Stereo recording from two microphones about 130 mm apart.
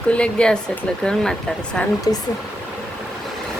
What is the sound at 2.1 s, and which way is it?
Speech, 30° left (ahead or behind).